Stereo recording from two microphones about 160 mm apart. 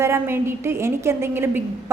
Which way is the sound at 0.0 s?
15° right (ahead or behind).